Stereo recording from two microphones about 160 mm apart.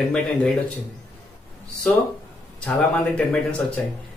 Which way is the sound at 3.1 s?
5° left (ahead or behind).